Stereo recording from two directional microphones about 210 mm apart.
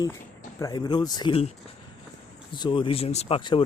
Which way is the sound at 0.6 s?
20° left (ahead or behind).